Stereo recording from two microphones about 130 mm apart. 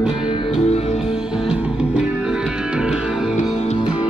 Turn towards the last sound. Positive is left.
turn(degrees=-5)  # may be behind; listen again after turning